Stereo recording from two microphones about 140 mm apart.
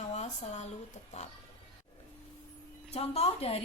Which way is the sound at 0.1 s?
50° left (ahead or behind).